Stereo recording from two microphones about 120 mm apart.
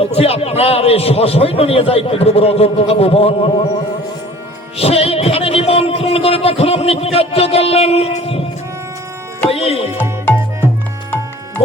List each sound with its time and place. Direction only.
0.0 s speech: 55° left (ahead or behind)
4.8 s speech: 55° left (ahead or behind)
9.5 s music: 55° left (ahead or behind)